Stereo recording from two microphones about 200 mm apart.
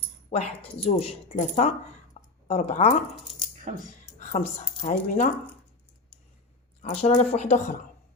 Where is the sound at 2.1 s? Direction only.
30° left (ahead or behind).